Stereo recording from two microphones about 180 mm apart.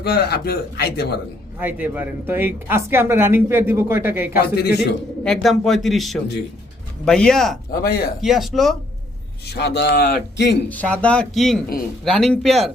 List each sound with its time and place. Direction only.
0.0 s a man's voice: 60° left (ahead or behind)
1.5 s speech: 10° right (ahead or behind)
4.4 s a man's voice: 60° left (ahead or behind)
5.2 s speech: centre (ahead or behind)
7.8 s a man's voice: 55° left (ahead or behind)
8.2 s speech: centre (ahead or behind)
9.5 s speech: 70° left (ahead or behind)
10.7 s speech: 5° left (ahead or behind)